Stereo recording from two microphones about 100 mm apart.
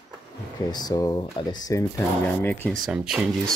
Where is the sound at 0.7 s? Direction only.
40° left (ahead or behind).